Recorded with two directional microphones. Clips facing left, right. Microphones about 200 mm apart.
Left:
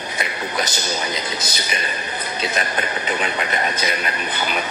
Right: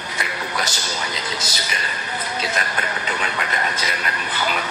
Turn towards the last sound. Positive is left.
turn(degrees=20)  # may be behind; listen again after turning